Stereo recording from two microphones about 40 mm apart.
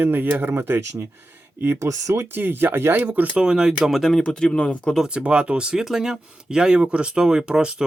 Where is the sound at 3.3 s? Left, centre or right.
Right.